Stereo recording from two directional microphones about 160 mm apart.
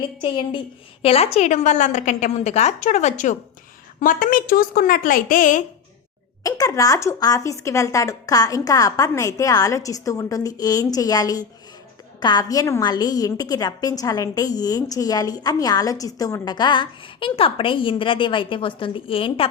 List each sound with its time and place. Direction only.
0.2 s a woman's voice: 30° left (ahead or behind); by 3.3 s 50° left (ahead or behind)
4.0 s a woman's voice: 60° left (ahead or behind)
6.4 s a woman's voice: 20° left (ahead or behind)